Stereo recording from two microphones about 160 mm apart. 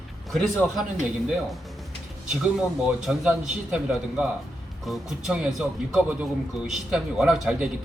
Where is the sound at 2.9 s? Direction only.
5° right (ahead or behind).